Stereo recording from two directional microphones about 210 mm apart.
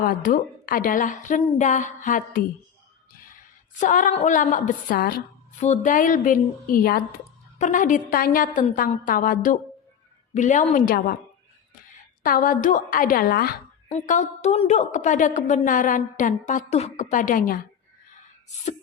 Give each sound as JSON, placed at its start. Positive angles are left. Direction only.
{"t": 0.0, "sound": "a woman's voice", "side_deg": 40}
{"t": 3.8, "sound": "a woman's voice", "side_deg": 35}
{"t": 12.2, "sound": "a woman's voice", "side_deg": 40}
{"t": 13.9, "sound": "a woman's voice", "side_deg": 35}